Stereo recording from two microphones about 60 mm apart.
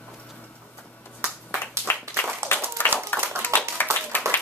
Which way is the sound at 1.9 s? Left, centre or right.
Left.